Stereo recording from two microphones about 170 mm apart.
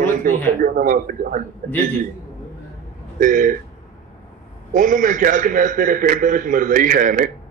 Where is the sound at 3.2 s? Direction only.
50° right (ahead or behind).